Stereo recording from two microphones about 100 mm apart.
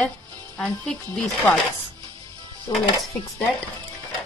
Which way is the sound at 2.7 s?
40° left (ahead or behind).